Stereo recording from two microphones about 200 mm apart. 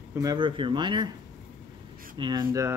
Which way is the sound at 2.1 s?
20° right (ahead or behind).